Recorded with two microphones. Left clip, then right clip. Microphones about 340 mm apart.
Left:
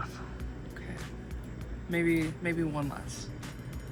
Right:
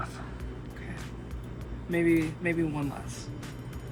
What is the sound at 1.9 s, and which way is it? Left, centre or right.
Speech, centre.